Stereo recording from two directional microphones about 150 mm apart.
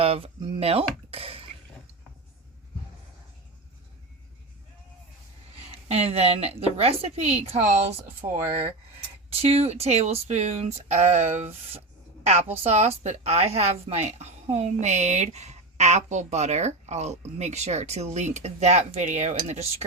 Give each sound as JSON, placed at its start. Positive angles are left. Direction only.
{"t": 0.0, "sound": "speech", "side_deg": -40}
{"t": 5.9, "sound": "a woman's voice", "side_deg": -45}